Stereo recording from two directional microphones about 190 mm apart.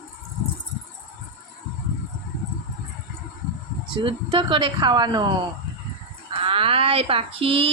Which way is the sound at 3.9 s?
25° right (ahead or behind).